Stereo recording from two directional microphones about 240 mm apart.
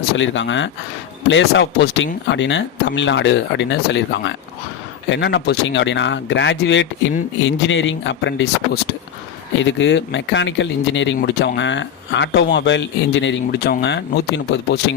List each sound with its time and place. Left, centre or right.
0.2 s speech: left